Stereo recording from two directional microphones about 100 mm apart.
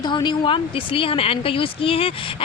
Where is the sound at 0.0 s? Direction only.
50° left (ahead or behind).